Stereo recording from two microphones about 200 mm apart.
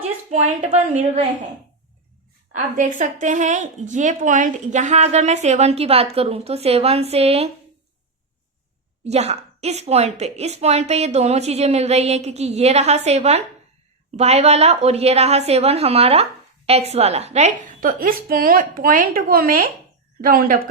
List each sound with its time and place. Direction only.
0.3 s a woman's voice: 35° right (ahead or behind)
2.6 s a woman's voice: 40° right (ahead or behind)
9.0 s a woman's voice: 35° right (ahead or behind)